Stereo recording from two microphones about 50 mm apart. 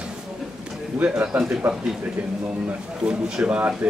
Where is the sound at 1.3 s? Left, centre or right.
Right.